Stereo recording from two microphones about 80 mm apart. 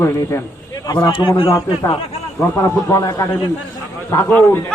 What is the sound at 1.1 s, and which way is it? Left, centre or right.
Speech, left.